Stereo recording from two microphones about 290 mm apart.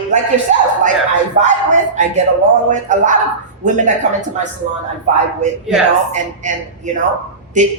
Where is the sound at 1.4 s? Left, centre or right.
Right.